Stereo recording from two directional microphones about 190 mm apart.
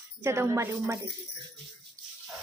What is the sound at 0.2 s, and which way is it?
Speech, 15° right (ahead or behind).